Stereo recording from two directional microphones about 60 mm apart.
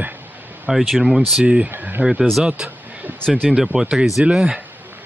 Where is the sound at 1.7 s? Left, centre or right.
Right.